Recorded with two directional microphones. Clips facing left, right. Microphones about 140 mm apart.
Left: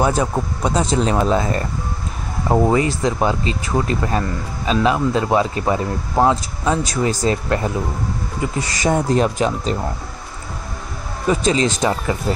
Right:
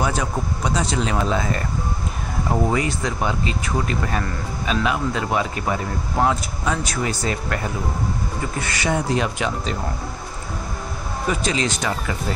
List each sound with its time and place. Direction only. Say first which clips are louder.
0.0 s speech: left 5 dB; 30° left (ahead or behind)
2.7 s speech: left 5 dB; 30° left (ahead or behind)
8.8 s speech: left 5 dB; 40° left (ahead or behind)
11.2 s speech: left 6 dB; 30° left (ahead or behind)